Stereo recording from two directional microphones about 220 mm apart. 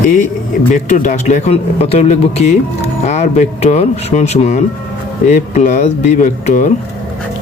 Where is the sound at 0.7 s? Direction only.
35° left (ahead or behind).